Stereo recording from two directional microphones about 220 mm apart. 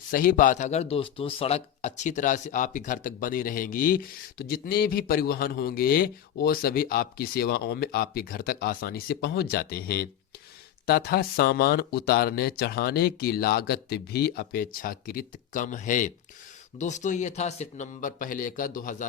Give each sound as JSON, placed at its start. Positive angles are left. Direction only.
{"t": 0.1, "sound": "a man's voice", "side_deg": 40}